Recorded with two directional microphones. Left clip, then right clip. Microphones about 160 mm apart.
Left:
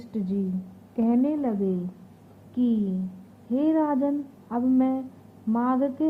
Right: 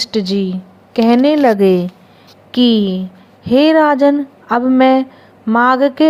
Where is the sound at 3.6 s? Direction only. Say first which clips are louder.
Right 14 dB; 45° right (ahead or behind).